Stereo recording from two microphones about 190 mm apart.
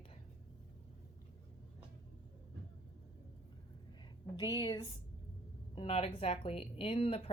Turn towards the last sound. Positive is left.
turn(degrees=30)  # may be behind; listen again after turning